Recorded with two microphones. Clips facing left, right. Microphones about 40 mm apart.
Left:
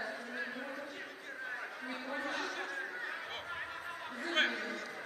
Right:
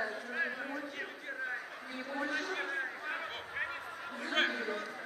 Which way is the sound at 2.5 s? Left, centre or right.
Right.